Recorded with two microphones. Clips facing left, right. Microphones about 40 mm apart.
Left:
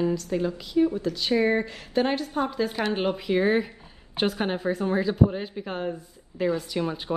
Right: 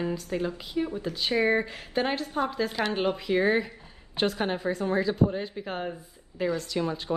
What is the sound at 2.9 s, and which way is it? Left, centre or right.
A woman's voice, centre.